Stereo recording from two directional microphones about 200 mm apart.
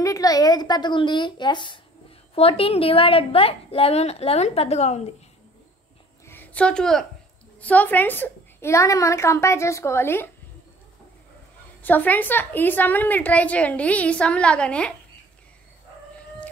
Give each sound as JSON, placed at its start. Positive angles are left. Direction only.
{"t": 0.0, "sound": "a woman's voice", "side_deg": 15}
{"t": 6.2, "sound": "a sound", "side_deg": 10}
{"t": 7.6, "sound": "a woman's voice", "side_deg": 10}
{"t": 11.8, "sound": "a woman's voice", "side_deg": 10}